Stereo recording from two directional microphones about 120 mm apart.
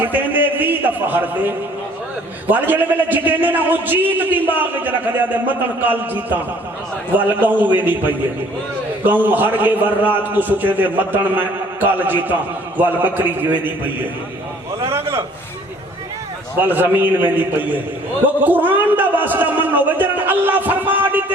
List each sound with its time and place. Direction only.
0.0 s a sound: 15° right (ahead or behind)
2.5 s a man's voice: 15° right (ahead or behind)
16.6 s a man's voice: 15° right (ahead or behind)